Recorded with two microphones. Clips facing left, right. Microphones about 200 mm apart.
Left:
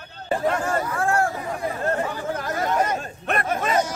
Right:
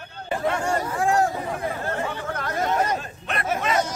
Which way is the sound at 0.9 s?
15° right (ahead or behind).